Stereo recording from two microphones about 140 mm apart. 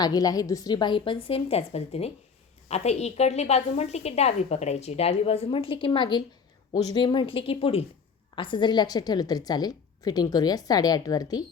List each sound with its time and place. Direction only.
0.0 s a woman's voice: 25° left (ahead or behind)